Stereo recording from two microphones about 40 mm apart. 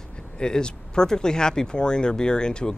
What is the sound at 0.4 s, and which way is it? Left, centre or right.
Speech, left.